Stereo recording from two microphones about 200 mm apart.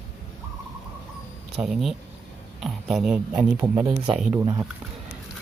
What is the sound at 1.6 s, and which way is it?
Speech, centre (ahead or behind).